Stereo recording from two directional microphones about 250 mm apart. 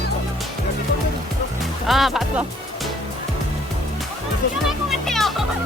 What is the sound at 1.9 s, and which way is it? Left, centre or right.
Speech, centre.